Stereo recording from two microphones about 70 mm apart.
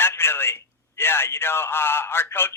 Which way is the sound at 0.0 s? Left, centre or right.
Left.